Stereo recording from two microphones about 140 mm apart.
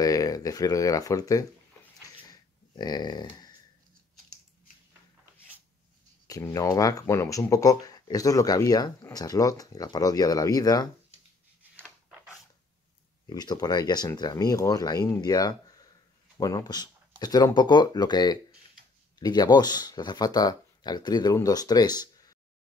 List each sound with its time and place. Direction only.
0.0 s speech: 25° left (ahead or behind)
2.2 s dog: 30° left (ahead or behind)
6.2 s speech: 25° left (ahead or behind)
13.3 s speech: 30° left (ahead or behind)